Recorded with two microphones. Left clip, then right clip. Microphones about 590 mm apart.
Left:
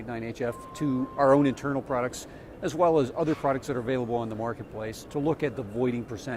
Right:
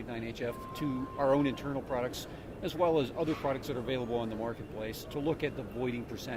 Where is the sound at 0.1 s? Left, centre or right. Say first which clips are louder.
Left 6 dB; left.